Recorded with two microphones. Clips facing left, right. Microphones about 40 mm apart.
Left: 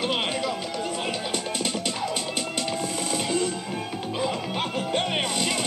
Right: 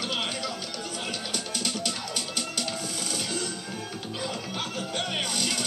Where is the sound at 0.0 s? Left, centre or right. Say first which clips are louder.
Left 5 dB; left.